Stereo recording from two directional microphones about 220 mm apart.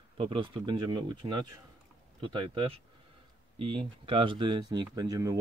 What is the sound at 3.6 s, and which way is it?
Speech, 25° right (ahead or behind).